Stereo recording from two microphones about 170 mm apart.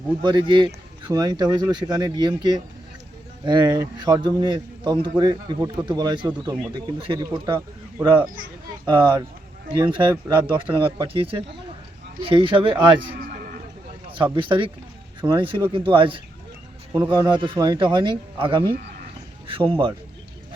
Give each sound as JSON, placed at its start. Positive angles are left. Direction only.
{"t": 0.2, "sound": "speech", "side_deg": -25}
{"t": 8.9, "sound": "speech", "side_deg": -30}
{"t": 13.1, "sound": "a sound", "side_deg": -60}
{"t": 14.3, "sound": "speech", "side_deg": -30}